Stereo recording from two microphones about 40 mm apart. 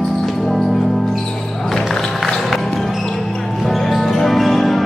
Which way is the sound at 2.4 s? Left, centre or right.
Centre.